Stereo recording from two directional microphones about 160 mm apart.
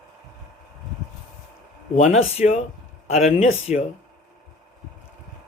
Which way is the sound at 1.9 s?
45° left (ahead or behind).